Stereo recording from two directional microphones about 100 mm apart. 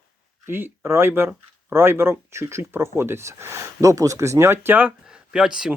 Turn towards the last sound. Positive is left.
turn(degrees=-5)  # may be behind; listen again after turning